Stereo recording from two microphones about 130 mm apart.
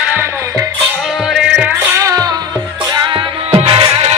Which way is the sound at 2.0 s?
25° right (ahead or behind).